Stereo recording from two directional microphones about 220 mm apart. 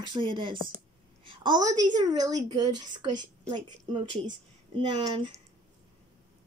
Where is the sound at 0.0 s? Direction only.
20° right (ahead or behind).